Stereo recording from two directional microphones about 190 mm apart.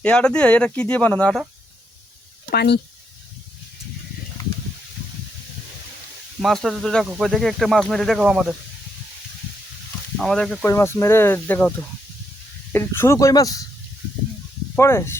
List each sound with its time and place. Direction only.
0.0 s speech: 5° left (ahead or behind)
2.5 s speech: 60° left (ahead or behind)
6.4 s speech: centre (ahead or behind)
10.2 s speech: centre (ahead or behind)
10.7 s speech: 15° left (ahead or behind)
12.7 s speech: 10° left (ahead or behind)
14.8 s speech: 15° left (ahead or behind)